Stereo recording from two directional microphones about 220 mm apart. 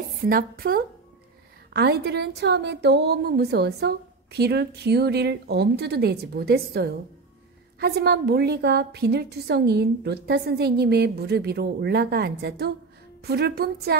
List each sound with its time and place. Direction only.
0.3 s a woman's voice: 40° right (ahead or behind)